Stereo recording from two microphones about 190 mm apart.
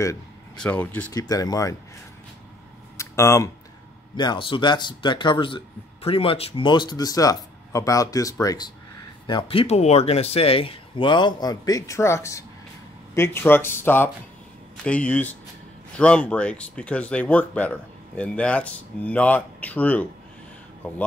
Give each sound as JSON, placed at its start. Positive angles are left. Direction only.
{"t": 0.6, "sound": "speech", "side_deg": 5}
{"t": 1.1, "sound": "speech", "side_deg": 20}
{"t": 3.0, "sound": "a sound", "side_deg": 15}
{"t": 4.2, "sound": "speech", "side_deg": 25}